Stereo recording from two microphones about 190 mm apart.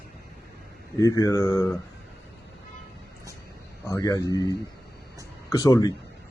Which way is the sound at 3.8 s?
15° left (ahead or behind).